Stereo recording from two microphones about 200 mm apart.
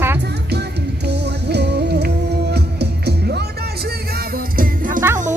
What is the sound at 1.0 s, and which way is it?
Music, 55° right (ahead or behind).